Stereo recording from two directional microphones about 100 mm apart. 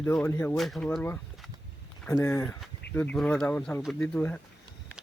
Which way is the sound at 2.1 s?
25° left (ahead or behind).